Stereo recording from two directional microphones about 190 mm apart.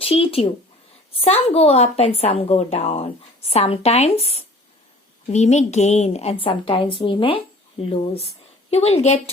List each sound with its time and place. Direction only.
0.0 s a woman's voice: 30° left (ahead or behind)